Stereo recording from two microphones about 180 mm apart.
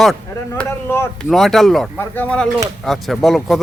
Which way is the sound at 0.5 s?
15° left (ahead or behind).